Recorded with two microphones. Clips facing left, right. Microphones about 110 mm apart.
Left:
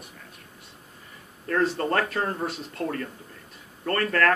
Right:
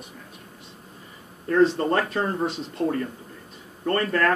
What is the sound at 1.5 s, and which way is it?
Speech, 15° right (ahead or behind).